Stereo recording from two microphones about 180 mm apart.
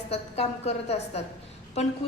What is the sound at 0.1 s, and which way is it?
A woman's voice, 35° left (ahead or behind).